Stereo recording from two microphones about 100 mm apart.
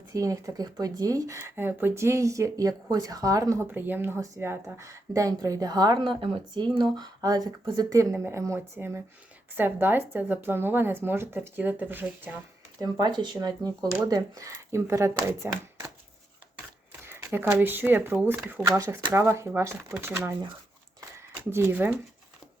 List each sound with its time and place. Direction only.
0.1 s speech: 35° right (ahead or behind)
3.7 s speech: 20° right (ahead or behind); by 7.9 s 45° right (ahead or behind)
7.9 s speech: 25° right (ahead or behind)
12.8 s speech: 45° right (ahead or behind); by 15.4 s 25° right (ahead or behind)
17.0 s speech: 25° right (ahead or behind)
18.6 s speech: 5° left (ahead or behind)
19.1 s speech: 30° right (ahead or behind)
21.5 s speech: 20° right (ahead or behind)